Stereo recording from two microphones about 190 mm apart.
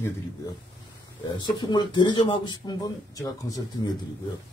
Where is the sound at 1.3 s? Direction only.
25° left (ahead or behind).